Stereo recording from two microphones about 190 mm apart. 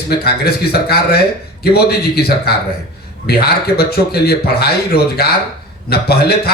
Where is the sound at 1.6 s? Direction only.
55° left (ahead or behind).